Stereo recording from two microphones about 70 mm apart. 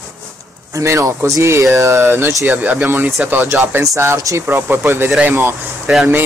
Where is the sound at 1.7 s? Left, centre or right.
Right.